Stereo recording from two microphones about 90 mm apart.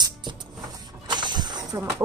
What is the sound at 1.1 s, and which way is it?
Mechanisms, 55° right (ahead or behind).